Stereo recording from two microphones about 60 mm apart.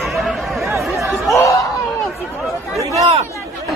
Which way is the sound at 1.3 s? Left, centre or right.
Left.